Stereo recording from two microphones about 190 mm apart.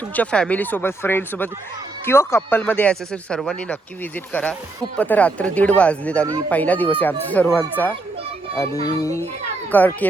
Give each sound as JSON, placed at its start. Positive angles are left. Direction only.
{"t": 0.1, "sound": "speech", "side_deg": 5}